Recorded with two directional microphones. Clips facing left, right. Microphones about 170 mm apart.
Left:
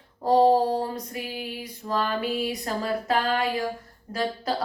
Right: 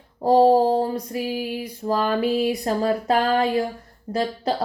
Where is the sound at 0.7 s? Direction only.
30° right (ahead or behind).